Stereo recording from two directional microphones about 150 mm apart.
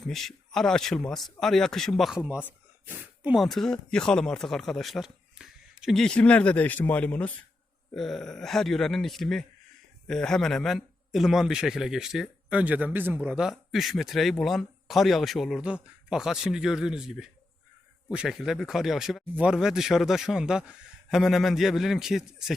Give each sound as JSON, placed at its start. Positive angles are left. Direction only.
{"t": 0.1, "sound": "a man's voice", "side_deg": 0}
{"t": 3.4, "sound": "a man's voice", "side_deg": 0}